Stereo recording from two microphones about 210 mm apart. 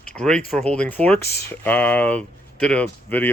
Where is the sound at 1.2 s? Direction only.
50° left (ahead or behind).